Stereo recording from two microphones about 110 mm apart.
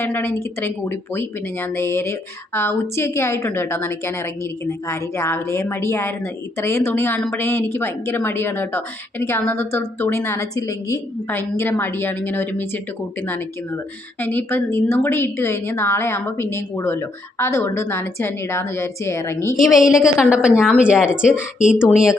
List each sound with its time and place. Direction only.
0.0 s a woman's voice: 20° left (ahead or behind)
14.2 s a woman's voice: 20° left (ahead or behind)
19.5 s a woman's voice: centre (ahead or behind)